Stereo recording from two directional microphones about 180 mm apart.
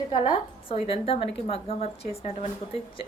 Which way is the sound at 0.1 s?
30° left (ahead or behind).